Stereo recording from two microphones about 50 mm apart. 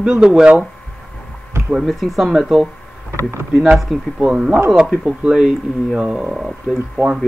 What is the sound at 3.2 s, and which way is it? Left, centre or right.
Speech, right.